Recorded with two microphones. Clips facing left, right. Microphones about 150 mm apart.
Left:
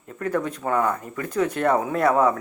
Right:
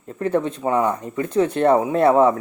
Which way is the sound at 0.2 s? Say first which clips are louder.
Right 4 dB; 25° right (ahead or behind).